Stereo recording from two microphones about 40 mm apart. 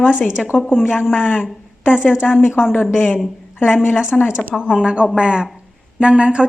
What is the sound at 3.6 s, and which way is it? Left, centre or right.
Speech, left.